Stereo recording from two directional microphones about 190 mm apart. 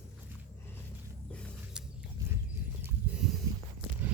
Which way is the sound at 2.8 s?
5° right (ahead or behind).